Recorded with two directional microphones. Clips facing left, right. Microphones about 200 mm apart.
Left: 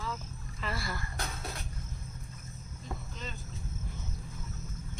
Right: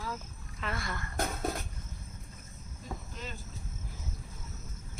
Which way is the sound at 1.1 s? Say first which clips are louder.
Right 7 dB; 50° right (ahead or behind).